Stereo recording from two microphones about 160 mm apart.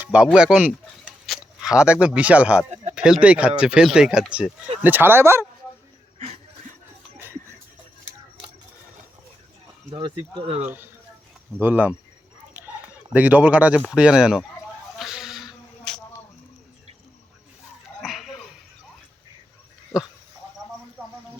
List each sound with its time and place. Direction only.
0.0 s speech: 10° right (ahead or behind)
6.1 s chuckle: 45° right (ahead or behind)
9.9 s speech: 30° right (ahead or behind)
11.6 s speech: 10° right (ahead or behind)
13.1 s speech: 10° right (ahead or behind)
14.9 s a sound: centre (ahead or behind)
18.0 s dog: centre (ahead or behind)